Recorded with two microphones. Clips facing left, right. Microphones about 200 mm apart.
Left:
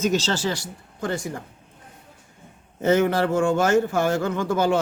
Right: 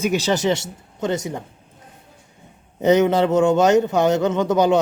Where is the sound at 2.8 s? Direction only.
20° right (ahead or behind).